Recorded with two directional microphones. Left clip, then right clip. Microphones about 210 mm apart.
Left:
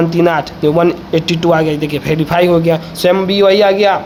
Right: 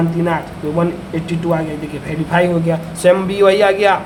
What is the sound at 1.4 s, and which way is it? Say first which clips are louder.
Speech: left 6 dB; 70° left (ahead or behind).